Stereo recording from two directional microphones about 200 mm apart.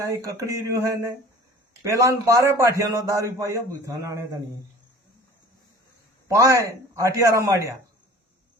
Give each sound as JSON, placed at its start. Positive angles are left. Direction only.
{"t": 0.0, "sound": "a man's voice", "side_deg": -15}
{"t": 6.2, "sound": "a man's voice", "side_deg": -15}